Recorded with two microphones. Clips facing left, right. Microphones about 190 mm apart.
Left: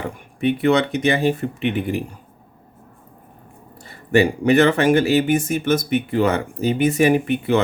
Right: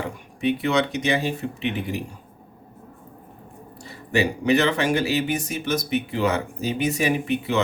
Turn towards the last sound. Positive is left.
turn(degrees=55)  # may be behind; listen again after turning